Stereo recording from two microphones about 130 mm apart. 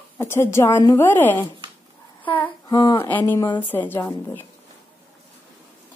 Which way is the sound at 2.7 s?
30° left (ahead or behind).